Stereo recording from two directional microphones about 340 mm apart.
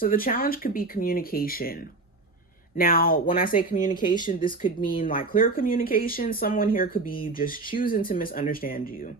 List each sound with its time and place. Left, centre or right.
0.0 s speech: left